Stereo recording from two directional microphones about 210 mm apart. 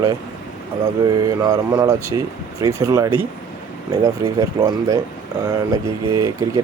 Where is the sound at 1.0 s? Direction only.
15° right (ahead or behind).